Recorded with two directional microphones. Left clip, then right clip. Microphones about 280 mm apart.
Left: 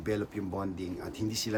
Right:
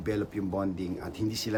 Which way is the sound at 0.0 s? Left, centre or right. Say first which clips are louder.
Right 2 dB; centre.